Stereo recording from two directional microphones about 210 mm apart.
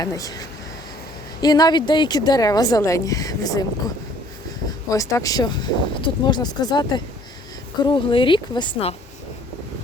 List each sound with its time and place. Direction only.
0.0 s a woman's voice: 15° left (ahead or behind)
4.9 s speech: 15° left (ahead or behind)